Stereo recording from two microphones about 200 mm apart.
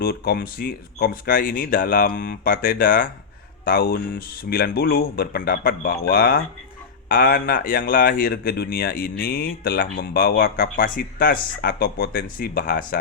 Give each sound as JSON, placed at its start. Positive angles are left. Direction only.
{"t": 0.0, "sound": "speech", "side_deg": 50}